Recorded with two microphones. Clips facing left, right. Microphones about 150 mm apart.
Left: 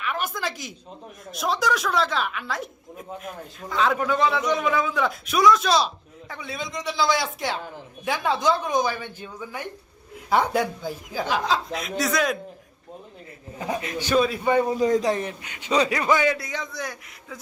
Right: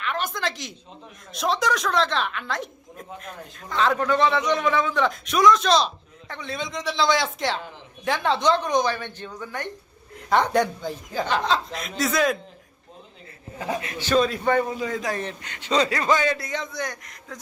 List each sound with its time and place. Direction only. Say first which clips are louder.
0.0 s a man's voice: right 1 dB; 5° left (ahead or behind)
14.0 s speech: right 1 dB; 10° left (ahead or behind)
14.7 s a man's voice: left 7 dB; 40° left (ahead or behind)
15.2 s speech: left 1 dB; 10° left (ahead or behind)
16.4 s a man's voice: right 2 dB; centre (ahead or behind)